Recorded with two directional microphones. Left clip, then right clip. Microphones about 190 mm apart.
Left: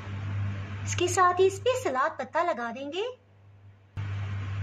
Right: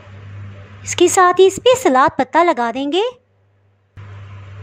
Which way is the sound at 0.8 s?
45° right (ahead or behind).